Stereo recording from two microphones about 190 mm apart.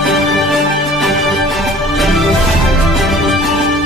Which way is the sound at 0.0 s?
Centre (ahead or behind).